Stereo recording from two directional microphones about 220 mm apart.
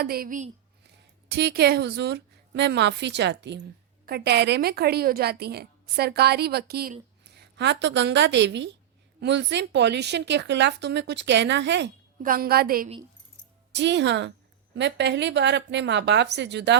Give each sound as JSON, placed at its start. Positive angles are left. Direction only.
{"t": 0.0, "sound": "a woman's voice", "side_deg": -45}
{"t": 1.3, "sound": "a woman's voice", "side_deg": -45}
{"t": 12.2, "sound": "a woman's voice", "side_deg": -40}
{"t": 13.7, "sound": "a woman's voice", "side_deg": -55}